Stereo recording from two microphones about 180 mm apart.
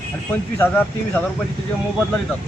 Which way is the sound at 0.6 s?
10° left (ahead or behind).